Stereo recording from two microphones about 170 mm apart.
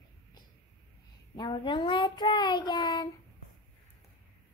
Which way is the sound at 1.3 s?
25° left (ahead or behind).